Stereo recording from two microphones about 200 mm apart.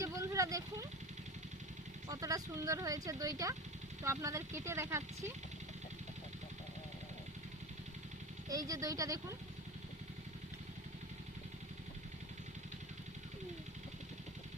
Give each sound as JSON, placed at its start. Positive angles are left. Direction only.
{"t": 0.0, "sound": "a sound", "side_deg": -15}
{"t": 2.0, "sound": "speech", "side_deg": -15}
{"t": 8.4, "sound": "speech", "side_deg": -15}